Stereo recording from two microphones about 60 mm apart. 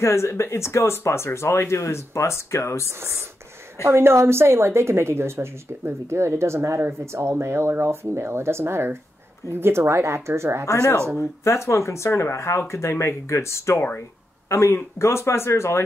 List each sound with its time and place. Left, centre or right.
0.0 s speech: left
2.9 s a woman's voice: right
10.7 s speech: left
13.7 s speech: left
14.5 s speech: left